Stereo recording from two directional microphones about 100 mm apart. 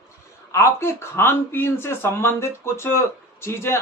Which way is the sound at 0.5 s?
25° left (ahead or behind).